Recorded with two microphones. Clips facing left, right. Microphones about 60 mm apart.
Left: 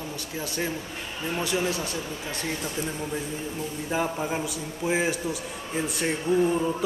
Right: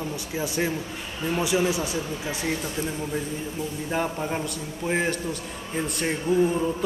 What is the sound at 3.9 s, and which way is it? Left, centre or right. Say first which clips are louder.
A man's voice: even; centre.